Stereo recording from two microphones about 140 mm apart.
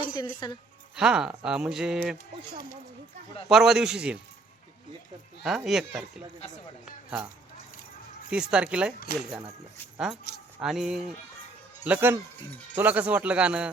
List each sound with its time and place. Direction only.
0.1 s speech: 30° left (ahead or behind)
0.9 s speech: 5° right (ahead or behind)
3.5 s speech: centre (ahead or behind)
5.4 s speech: centre (ahead or behind)
8.3 s speech: 5° right (ahead or behind)
10.6 s speech: 5° right (ahead or behind)
11.8 s speech: 15° right (ahead or behind)